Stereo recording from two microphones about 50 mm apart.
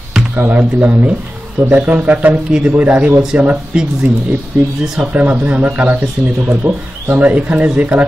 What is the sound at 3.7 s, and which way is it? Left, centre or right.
Speech, right.